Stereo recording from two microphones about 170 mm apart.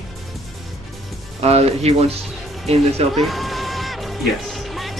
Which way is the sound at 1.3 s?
40° right (ahead or behind).